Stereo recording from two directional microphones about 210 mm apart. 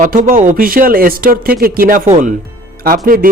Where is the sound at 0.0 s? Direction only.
40° right (ahead or behind).